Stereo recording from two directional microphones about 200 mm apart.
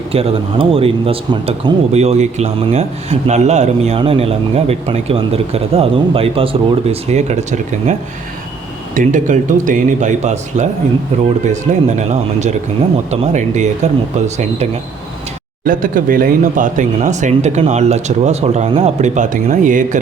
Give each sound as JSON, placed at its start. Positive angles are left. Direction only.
{"t": 0.1, "sound": "speech", "side_deg": -30}
{"t": 9.0, "sound": "speech", "side_deg": -40}